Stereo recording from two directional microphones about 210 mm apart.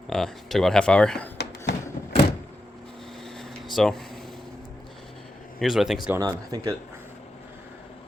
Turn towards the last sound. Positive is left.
turn(degrees=-15)  # may be behind; listen again after turning